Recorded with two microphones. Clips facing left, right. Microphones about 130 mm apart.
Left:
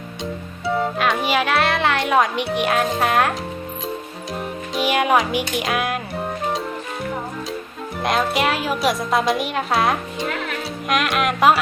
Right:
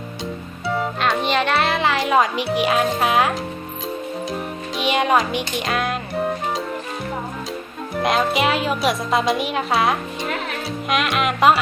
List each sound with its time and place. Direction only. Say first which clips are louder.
0.8 s a child's voice: even; centre (ahead or behind)
4.7 s speech: left 1 dB; 5° left (ahead or behind)
8.0 s speech: right 1 dB; centre (ahead or behind)